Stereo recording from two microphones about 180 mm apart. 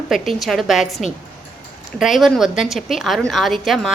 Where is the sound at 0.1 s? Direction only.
Centre (ahead or behind).